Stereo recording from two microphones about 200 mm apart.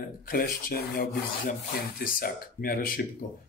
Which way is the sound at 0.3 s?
45° left (ahead or behind).